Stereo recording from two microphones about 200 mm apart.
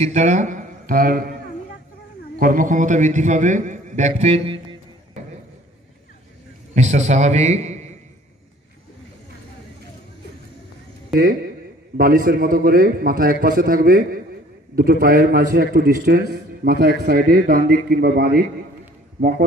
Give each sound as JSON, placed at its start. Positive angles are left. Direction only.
{"t": 0.0, "sound": "speech", "side_deg": -35}
{"t": 2.3, "sound": "a man's voice", "side_deg": -45}
{"t": 6.7, "sound": "a man's voice", "side_deg": -35}
{"t": 12.0, "sound": "a man's voice", "side_deg": -45}